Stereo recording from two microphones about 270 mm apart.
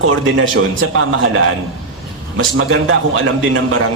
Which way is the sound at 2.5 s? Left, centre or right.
Right.